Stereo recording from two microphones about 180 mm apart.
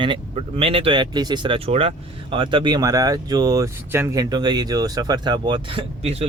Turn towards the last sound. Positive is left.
turn(degrees=-30)  # may be behind; listen again after turning